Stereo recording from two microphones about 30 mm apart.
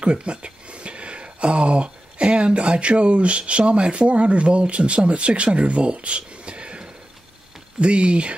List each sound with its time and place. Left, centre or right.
0.0 s speech: right
7.8 s speech: right